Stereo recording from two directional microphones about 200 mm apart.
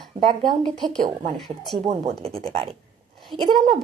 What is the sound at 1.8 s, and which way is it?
A woman's voice, 35° right (ahead or behind).